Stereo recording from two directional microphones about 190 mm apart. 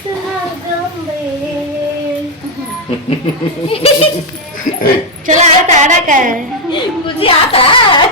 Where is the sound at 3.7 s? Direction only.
30° left (ahead or behind).